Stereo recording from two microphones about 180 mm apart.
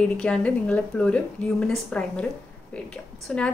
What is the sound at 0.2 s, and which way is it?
Speech, 5° left (ahead or behind).